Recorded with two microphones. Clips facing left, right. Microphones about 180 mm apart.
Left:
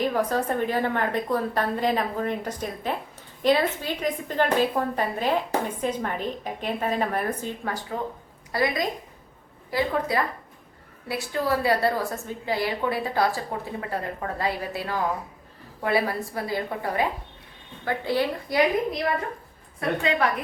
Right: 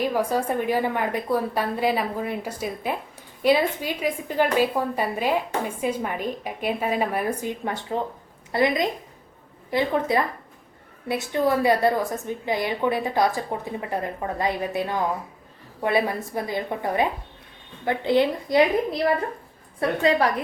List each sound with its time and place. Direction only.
0.0 s a woman's voice: 10° right (ahead or behind)
7.7 s a woman's voice: 25° right (ahead or behind)